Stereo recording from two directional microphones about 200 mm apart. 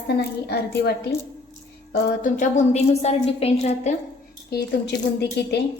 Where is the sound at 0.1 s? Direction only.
55° left (ahead or behind).